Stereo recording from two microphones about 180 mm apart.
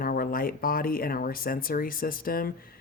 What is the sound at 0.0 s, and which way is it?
Speech, 55° left (ahead or behind).